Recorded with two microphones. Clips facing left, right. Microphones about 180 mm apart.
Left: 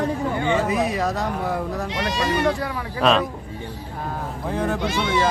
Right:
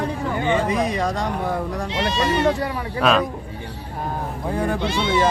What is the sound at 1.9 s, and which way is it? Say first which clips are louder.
Speech: right 3 dB; 25° right (ahead or behind).